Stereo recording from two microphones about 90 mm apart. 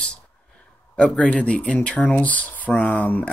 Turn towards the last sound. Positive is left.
turn(degrees=15)  # may be behind; listen again after turning